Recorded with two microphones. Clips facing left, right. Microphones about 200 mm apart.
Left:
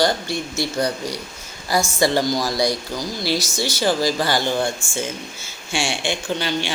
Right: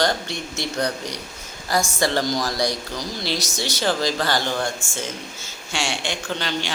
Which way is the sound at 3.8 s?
5° left (ahead or behind).